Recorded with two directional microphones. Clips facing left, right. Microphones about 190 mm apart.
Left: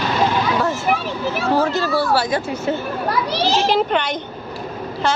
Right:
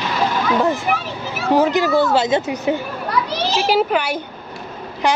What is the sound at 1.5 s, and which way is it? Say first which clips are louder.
Speech: right 5 dB; 15° right (ahead or behind).